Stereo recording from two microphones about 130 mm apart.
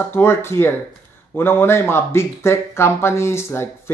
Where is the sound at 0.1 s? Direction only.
20° left (ahead or behind).